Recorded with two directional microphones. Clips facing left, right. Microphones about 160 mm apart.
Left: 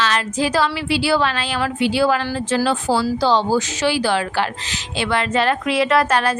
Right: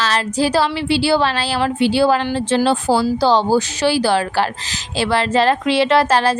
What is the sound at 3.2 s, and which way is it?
A woman's voice, 35° right (ahead or behind).